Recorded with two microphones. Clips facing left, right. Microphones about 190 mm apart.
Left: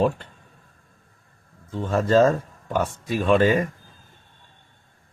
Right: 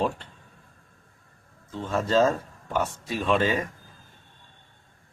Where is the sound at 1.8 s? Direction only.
55° left (ahead or behind).